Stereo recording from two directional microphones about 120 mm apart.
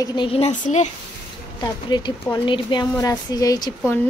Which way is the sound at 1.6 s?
40° left (ahead or behind).